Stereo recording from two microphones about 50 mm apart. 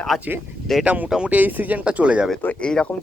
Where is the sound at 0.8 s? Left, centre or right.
Right.